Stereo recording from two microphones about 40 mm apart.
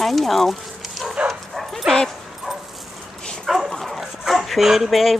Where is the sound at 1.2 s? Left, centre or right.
Centre.